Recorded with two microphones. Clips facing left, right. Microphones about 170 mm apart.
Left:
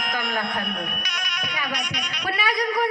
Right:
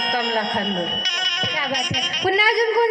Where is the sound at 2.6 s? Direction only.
35° right (ahead or behind).